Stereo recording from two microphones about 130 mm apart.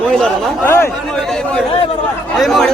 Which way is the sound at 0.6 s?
20° left (ahead or behind).